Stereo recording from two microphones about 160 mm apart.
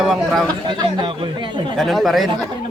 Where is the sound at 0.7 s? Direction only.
30° right (ahead or behind).